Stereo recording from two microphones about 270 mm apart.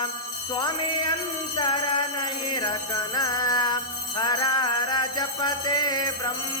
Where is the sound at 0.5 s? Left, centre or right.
Centre.